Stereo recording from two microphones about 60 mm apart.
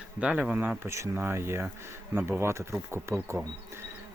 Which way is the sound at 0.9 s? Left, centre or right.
Right.